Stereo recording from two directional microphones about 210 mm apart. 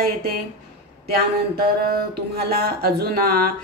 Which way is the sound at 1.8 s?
50° right (ahead or behind).